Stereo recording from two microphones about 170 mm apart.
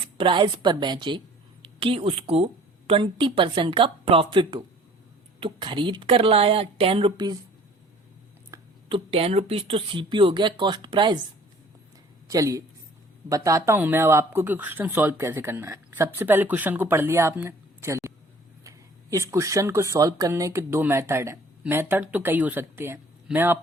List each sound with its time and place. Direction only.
0.2 s a woman's voice: 30° right (ahead or behind)
8.9 s speech: 30° right (ahead or behind)
12.3 s a woman's voice: 20° right (ahead or behind)
19.1 s speech: 15° right (ahead or behind)